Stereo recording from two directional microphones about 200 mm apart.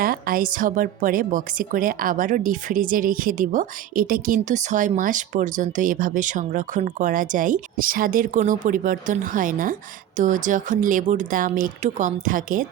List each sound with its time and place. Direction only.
0.0 s a woman's voice: 45° right (ahead or behind)